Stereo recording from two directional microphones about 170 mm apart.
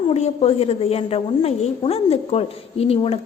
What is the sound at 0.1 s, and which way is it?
A woman's voice, 35° left (ahead or behind).